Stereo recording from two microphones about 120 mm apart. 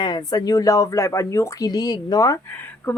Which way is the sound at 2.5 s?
15° left (ahead or behind).